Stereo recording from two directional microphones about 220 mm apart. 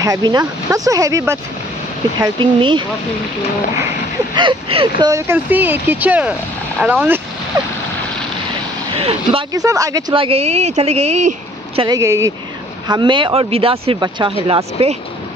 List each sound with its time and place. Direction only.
0.0 s speech: 15° right (ahead or behind)
4.4 s speech: 25° right (ahead or behind)
8.9 s speech: 25° right (ahead or behind)
12.0 s speech: 10° right (ahead or behind)